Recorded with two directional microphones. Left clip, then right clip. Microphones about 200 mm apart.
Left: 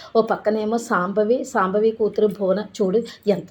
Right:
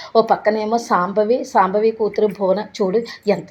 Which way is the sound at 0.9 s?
5° left (ahead or behind).